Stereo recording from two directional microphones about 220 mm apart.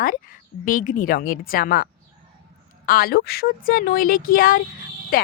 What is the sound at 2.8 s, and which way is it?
Speech, 45° left (ahead or behind).